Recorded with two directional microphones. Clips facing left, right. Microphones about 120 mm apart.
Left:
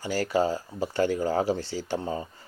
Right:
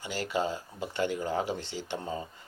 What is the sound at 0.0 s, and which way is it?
Speech, 40° left (ahead or behind).